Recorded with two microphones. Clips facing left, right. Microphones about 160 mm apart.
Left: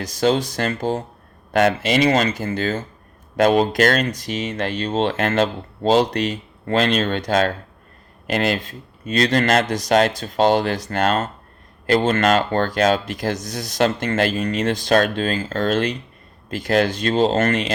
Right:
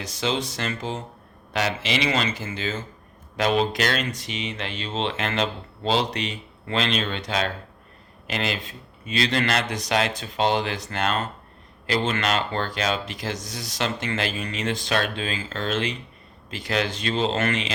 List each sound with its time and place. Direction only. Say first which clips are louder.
0.2 s speech: left 8 dB; 50° left (ahead or behind)
1.5 s speech: left 8 dB; 50° left (ahead or behind)